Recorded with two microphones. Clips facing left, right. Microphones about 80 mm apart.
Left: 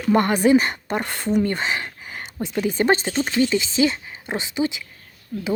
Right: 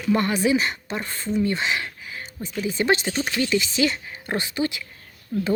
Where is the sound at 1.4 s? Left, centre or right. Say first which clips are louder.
Right 1 dB; left.